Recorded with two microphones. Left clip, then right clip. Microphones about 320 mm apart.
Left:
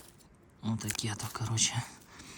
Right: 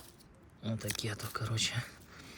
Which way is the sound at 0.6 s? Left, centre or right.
Centre.